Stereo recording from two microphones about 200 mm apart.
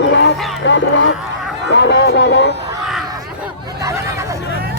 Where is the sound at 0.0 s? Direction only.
65° left (ahead or behind).